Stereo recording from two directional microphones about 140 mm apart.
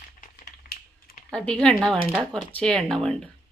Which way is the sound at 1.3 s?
5° left (ahead or behind).